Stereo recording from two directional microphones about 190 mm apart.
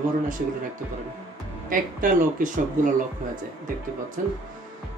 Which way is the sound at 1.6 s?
45° right (ahead or behind).